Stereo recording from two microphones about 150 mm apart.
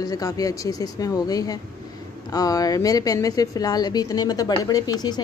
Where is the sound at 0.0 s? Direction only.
25° left (ahead or behind).